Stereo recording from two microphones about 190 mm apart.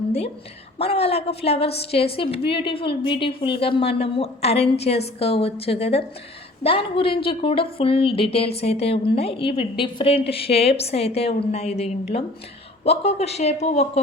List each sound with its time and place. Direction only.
0.8 s a woman's voice: 30° left (ahead or behind)